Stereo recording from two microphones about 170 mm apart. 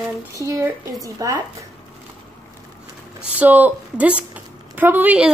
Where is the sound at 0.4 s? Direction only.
20° right (ahead or behind).